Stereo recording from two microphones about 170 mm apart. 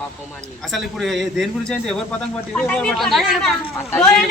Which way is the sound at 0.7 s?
Centre (ahead or behind).